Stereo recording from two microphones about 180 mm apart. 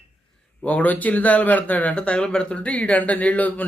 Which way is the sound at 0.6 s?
10° left (ahead or behind).